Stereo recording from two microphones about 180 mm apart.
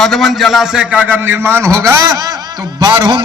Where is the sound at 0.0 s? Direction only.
Centre (ahead or behind).